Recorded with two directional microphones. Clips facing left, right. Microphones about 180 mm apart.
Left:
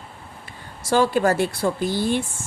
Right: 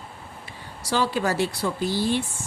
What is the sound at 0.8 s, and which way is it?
A woman's voice, 50° left (ahead or behind).